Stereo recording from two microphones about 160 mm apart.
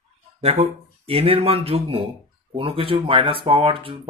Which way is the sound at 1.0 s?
35° right (ahead or behind).